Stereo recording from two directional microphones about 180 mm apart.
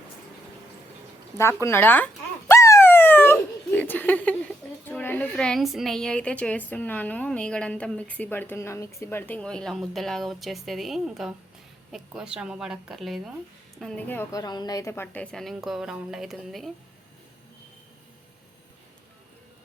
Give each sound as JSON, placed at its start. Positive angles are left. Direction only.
{"t": 1.6, "sound": "a woman's voice", "side_deg": 10}
{"t": 14.4, "sound": "a woman's voice", "side_deg": 25}